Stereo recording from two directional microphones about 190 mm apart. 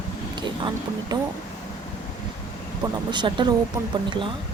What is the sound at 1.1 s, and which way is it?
Speech, 20° right (ahead or behind).